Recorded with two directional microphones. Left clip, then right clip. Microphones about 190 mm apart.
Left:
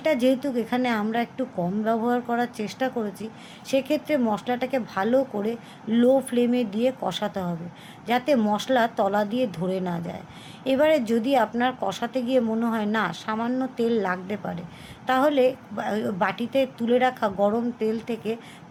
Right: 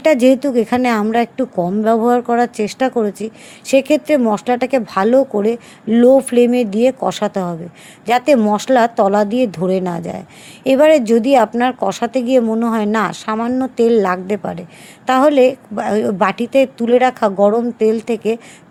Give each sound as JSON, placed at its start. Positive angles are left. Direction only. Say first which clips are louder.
{"t": 0.0, "sound": "speech", "louder": "right 11 dB", "side_deg": -45}